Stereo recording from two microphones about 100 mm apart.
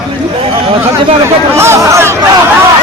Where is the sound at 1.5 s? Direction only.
25° right (ahead or behind).